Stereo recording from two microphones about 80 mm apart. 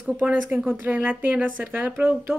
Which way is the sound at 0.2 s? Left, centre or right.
Right.